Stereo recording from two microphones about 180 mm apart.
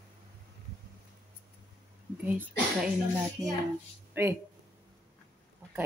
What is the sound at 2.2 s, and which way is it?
Speech, 10° right (ahead or behind).